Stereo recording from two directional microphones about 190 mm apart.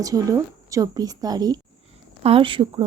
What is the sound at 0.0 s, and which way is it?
Speech, 20° right (ahead or behind).